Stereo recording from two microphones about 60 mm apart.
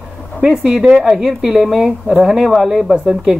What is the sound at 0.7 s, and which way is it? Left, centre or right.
Speech, centre.